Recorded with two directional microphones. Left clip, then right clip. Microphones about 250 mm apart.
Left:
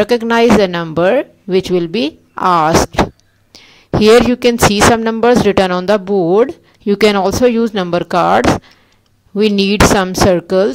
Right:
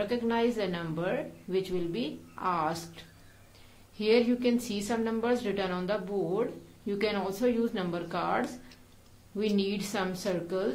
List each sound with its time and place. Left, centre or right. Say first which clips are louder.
0.0 s speech: left 18 dB; left
4.0 s speech: left 18 dB; left